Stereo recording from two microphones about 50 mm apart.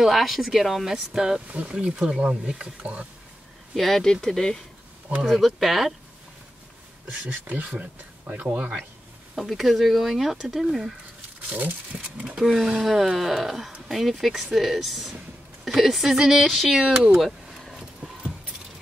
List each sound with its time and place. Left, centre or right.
0.0 s speech: centre
1.5 s speech: right
3.7 s speech: centre
7.2 s speech: right
9.4 s speech: centre
11.9 s speech: right
12.4 s speech: centre
16.8 s speech: centre
17.2 s keys jangling: centre